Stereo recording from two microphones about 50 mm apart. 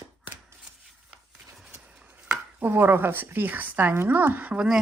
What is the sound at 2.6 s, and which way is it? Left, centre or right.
Speech, right.